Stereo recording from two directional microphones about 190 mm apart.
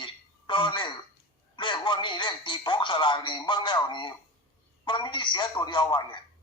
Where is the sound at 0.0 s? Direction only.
25° left (ahead or behind).